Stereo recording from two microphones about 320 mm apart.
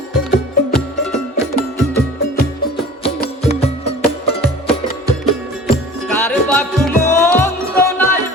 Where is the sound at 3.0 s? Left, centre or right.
Centre.